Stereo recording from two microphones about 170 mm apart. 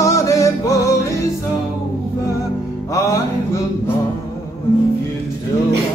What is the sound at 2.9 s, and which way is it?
Music, 20° left (ahead or behind).